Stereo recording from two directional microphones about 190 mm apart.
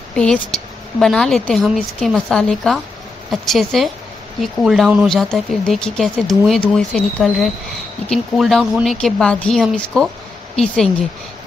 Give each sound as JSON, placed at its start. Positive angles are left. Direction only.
{"t": 0.1, "sound": "speech", "side_deg": 5}